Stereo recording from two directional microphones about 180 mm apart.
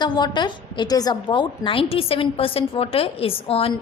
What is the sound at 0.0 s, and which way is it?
A woman's voice, 25° left (ahead or behind).